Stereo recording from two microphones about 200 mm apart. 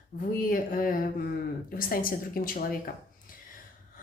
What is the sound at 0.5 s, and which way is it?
A woman's voice, 45° left (ahead or behind).